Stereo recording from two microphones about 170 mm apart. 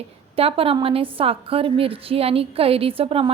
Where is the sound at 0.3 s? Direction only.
35° right (ahead or behind).